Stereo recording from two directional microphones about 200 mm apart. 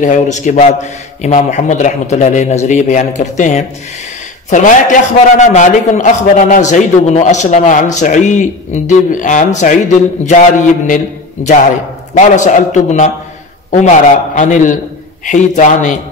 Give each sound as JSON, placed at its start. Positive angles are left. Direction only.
{"t": 0.0, "sound": "a man's voice", "side_deg": 40}
{"t": 12.1, "sound": "a man's voice", "side_deg": 35}